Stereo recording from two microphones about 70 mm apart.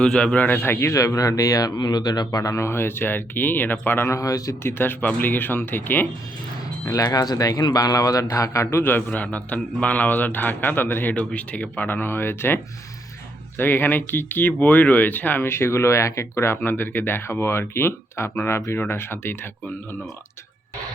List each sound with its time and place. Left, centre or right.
0.0 s a man's voice: centre
0.3 s speech: left
4.2 s speech: left
4.6 s a man's voice: left
6.8 s speech: left
7.6 s a man's voice: left
9.0 s a man's voice: centre
13.6 s speech: left
16.6 s speech: left